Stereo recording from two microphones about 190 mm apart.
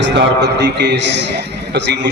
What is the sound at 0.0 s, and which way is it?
A man's voice, 65° right (ahead or behind).